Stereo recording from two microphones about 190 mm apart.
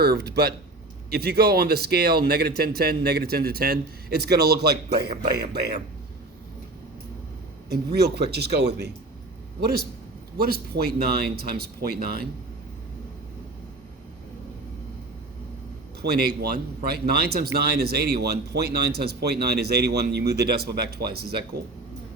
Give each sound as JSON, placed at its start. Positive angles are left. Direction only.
{"t": 0.0, "sound": "speech", "side_deg": -55}
{"t": 7.9, "sound": "speech", "side_deg": -60}
{"t": 10.3, "sound": "speech", "side_deg": -55}
{"t": 16.0, "sound": "speech", "side_deg": -55}